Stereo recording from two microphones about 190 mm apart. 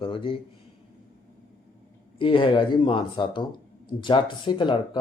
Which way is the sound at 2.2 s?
25° left (ahead or behind).